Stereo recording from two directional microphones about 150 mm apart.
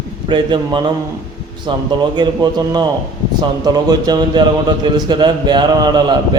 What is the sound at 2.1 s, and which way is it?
Speech, 30° right (ahead or behind).